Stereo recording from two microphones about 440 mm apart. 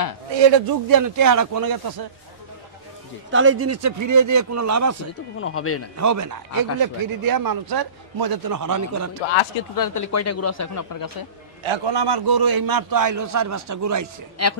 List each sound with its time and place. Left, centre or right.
0.4 s a man's voice: right
0.8 s a man's voice: right
3.3 s a man's voice: right
5.4 s speech: left
5.9 s a man's voice: right
9.8 s speech: left
11.6 s a man's voice: right
14.4 s speech: left